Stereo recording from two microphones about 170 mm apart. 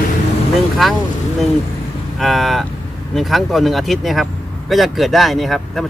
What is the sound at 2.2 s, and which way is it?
Speech, centre (ahead or behind).